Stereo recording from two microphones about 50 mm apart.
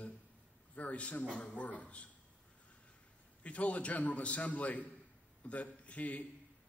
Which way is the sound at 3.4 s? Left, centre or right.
Left.